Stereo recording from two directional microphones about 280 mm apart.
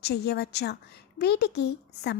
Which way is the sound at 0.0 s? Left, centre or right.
Left.